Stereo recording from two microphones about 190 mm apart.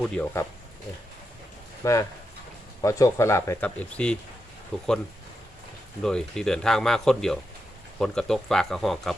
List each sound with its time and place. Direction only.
0.0 s speech: 5° left (ahead or behind)
1.8 s speech: 15° left (ahead or behind)
6.0 s speech: 5° left (ahead or behind)